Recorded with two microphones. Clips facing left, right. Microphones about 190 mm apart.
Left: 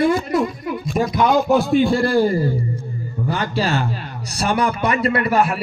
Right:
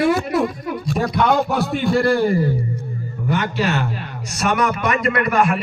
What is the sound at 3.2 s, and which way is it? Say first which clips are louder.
A man's voice: right 1 dB; 35° left (ahead or behind).